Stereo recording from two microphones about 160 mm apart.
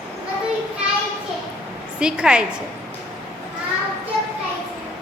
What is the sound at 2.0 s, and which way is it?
Speech, 5° right (ahead or behind).